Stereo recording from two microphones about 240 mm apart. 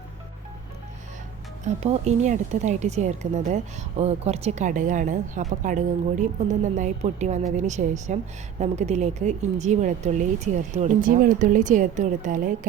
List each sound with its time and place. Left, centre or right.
1.6 s speech: right